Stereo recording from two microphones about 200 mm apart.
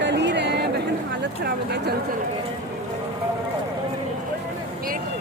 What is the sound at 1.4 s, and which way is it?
Speech, 50° right (ahead or behind).